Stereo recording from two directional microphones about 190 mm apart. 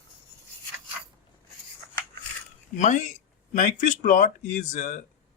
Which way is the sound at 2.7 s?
40° left (ahead or behind).